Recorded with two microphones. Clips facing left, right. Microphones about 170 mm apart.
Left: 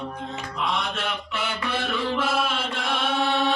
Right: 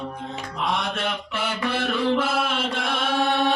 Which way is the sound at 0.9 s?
55° right (ahead or behind).